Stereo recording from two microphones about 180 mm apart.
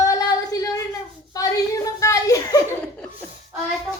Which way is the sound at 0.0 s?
20° left (ahead or behind).